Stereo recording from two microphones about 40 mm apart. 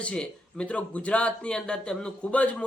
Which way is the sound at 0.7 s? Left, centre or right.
Left.